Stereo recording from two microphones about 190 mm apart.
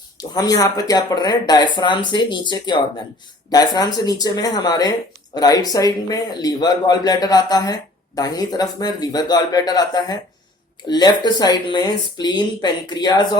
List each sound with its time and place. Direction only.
0.2 s speech: 20° left (ahead or behind)